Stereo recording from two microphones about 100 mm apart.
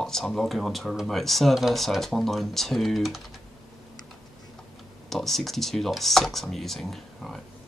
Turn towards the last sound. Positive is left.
turn(degrees=0)  # may be behind; listen again after turning